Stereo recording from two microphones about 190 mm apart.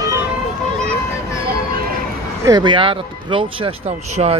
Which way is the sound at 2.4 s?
20° right (ahead or behind).